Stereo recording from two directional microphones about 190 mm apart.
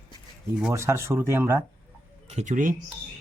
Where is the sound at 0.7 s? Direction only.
15° right (ahead or behind).